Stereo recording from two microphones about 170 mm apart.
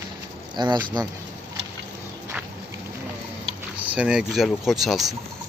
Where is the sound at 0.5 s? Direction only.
25° right (ahead or behind).